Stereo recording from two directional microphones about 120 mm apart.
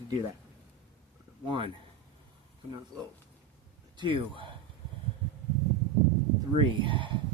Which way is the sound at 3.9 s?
45° right (ahead or behind).